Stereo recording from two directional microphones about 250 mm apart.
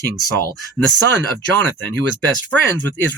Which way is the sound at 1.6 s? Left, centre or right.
Right.